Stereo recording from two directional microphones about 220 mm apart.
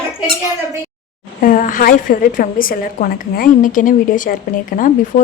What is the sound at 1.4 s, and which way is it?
A woman's voice, 40° left (ahead or behind).